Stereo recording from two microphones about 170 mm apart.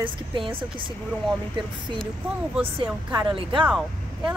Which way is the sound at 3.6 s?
5° right (ahead or behind).